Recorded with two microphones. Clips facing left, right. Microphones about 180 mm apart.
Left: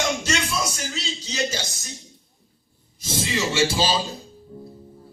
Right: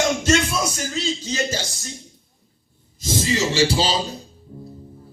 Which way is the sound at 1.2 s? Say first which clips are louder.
Right 2 dB; 50° right (ahead or behind).